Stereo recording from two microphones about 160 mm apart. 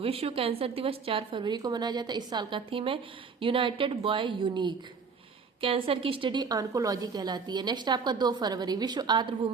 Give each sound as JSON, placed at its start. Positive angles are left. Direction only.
{"t": 0.0, "sound": "a woman's voice", "side_deg": -35}